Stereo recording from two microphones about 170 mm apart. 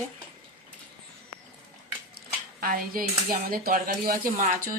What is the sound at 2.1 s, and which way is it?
Speech, 60° right (ahead or behind).